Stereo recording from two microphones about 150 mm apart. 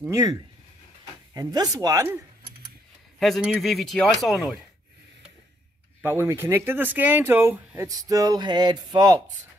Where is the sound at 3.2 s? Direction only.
Centre (ahead or behind).